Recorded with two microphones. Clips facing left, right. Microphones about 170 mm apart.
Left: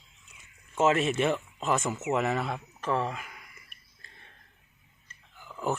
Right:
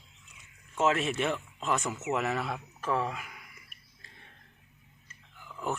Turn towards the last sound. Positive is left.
turn(degrees=0)  # may be behind; listen again after turning